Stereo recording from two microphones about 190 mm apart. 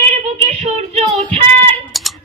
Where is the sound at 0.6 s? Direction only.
35° right (ahead or behind).